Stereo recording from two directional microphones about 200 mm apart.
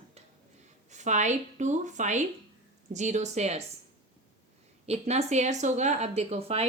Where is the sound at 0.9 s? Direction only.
35° right (ahead or behind).